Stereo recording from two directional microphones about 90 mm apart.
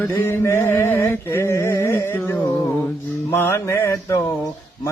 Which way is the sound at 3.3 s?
30° left (ahead or behind).